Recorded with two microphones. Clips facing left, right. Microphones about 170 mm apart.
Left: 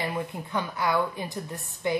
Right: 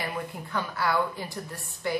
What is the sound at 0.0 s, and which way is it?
A woman's voice, 20° left (ahead or behind).